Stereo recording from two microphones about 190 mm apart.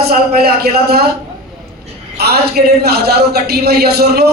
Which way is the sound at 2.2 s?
60° right (ahead or behind).